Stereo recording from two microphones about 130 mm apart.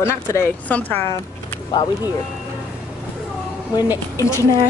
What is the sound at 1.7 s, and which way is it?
Speech, 35° left (ahead or behind).